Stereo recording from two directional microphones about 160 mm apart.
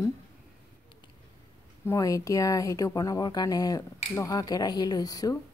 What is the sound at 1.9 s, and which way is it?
Speech, 20° left (ahead or behind).